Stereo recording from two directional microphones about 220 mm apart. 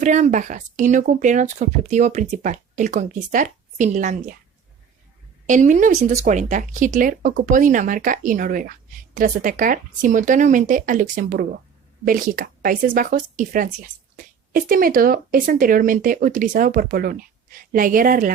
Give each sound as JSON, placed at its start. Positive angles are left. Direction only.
{"t": 0.0, "sound": "speech", "side_deg": -35}
{"t": 5.5, "sound": "speech", "side_deg": -35}